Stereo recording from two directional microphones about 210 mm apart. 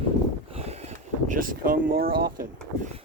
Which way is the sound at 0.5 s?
30° right (ahead or behind).